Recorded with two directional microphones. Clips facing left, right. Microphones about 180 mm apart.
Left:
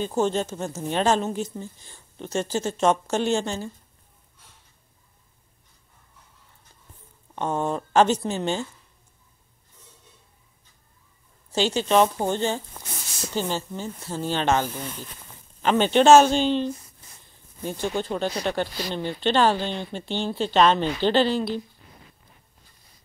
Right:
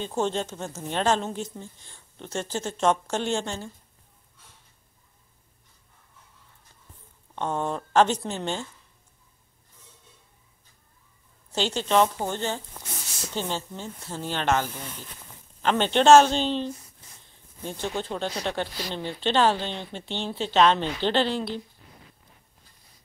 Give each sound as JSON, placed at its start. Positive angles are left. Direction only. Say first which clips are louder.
{"t": 0.0, "sound": "speech", "louder": "left 3 dB", "side_deg": 5}
{"t": 7.3, "sound": "speech", "louder": "left 2 dB", "side_deg": 10}
{"t": 11.5, "sound": "speech", "louder": "left 3 dB", "side_deg": 10}
{"t": 13.3, "sound": "speech", "louder": "left 3 dB", "side_deg": 5}